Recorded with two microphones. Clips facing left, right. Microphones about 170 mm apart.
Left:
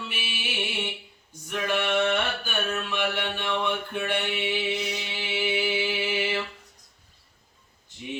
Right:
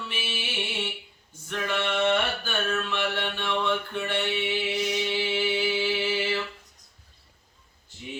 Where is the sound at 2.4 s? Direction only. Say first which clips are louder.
Right 1 dB; 15° left (ahead or behind).